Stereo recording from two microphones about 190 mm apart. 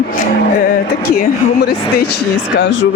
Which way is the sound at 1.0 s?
55° left (ahead or behind).